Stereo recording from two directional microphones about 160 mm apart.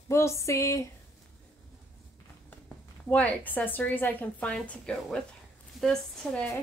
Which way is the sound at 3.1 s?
10° left (ahead or behind).